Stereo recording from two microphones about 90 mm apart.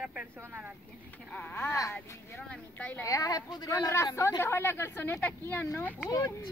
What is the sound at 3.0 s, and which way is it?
Speech, 40° left (ahead or behind).